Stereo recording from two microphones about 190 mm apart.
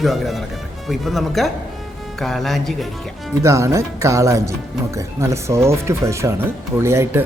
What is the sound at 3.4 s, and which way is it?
Speech, 15° right (ahead or behind).